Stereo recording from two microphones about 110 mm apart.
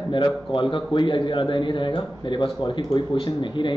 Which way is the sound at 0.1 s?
50° left (ahead or behind).